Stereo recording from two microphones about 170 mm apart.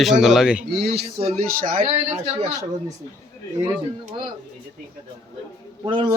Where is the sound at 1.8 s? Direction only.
40° right (ahead or behind).